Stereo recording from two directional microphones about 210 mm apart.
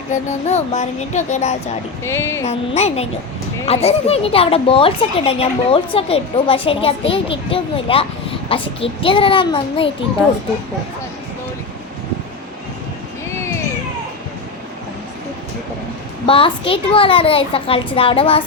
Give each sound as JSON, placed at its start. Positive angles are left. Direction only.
{"t": 0.1, "sound": "speech", "side_deg": 35}
{"t": 2.0, "sound": "speech", "side_deg": 15}
{"t": 2.4, "sound": "speech", "side_deg": 30}
{"t": 16.2, "sound": "speech", "side_deg": 25}